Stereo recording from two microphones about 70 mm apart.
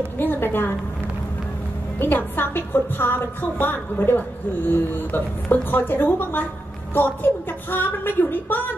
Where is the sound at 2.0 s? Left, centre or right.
Left.